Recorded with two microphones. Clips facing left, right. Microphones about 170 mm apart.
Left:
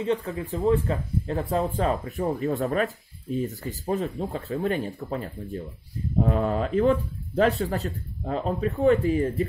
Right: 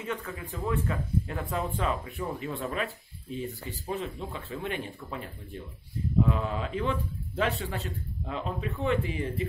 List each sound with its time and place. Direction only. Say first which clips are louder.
0.0 s speech: left 9 dB; 30° left (ahead or behind)